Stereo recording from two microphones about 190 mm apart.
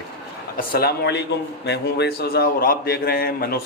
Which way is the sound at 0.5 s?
50° left (ahead or behind).